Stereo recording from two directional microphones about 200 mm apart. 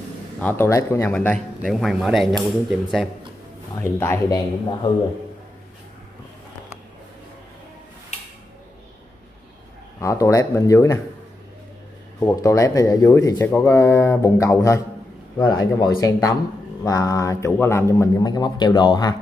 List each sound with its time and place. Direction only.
0.4 s speech: 10° left (ahead or behind)
3.7 s a man's voice: 15° left (ahead or behind)
9.9 s a man's voice: 15° left (ahead or behind)
12.2 s a man's voice: 15° left (ahead or behind)